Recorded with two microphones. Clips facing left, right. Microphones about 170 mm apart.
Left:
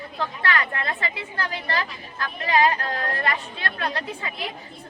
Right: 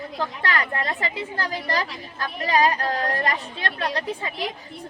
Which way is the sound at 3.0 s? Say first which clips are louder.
Right 2 dB; 40° right (ahead or behind).